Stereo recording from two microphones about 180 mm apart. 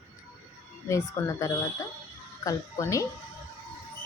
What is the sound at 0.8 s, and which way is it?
A woman's voice, 15° left (ahead or behind).